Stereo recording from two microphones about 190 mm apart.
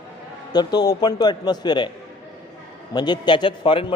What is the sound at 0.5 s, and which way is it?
Speech, 20° left (ahead or behind).